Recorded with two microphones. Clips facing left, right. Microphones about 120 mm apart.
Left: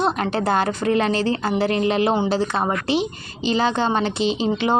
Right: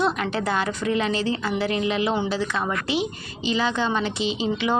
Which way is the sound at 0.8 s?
45° left (ahead or behind).